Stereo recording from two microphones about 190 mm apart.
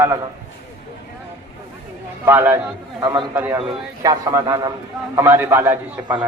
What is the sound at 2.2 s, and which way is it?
Speech, 10° right (ahead or behind).